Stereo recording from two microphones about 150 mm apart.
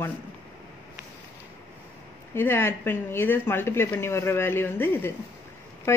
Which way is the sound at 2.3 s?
15° left (ahead or behind).